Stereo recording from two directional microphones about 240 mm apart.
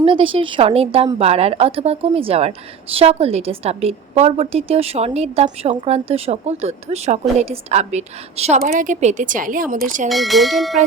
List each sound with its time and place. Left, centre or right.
0.0 s a woman's voice: right
10.1 s speech: centre